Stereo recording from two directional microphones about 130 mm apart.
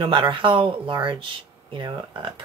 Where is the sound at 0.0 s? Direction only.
40° right (ahead or behind).